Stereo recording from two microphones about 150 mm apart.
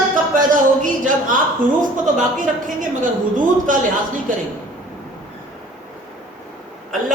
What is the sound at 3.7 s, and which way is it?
Speech, 60° right (ahead or behind).